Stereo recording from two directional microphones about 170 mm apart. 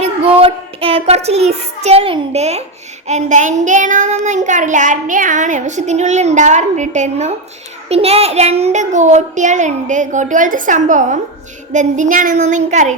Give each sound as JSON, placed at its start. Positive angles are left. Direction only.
{"t": 0.0, "sound": "a child's voice", "side_deg": -35}
{"t": 3.1, "sound": "child singing", "side_deg": -45}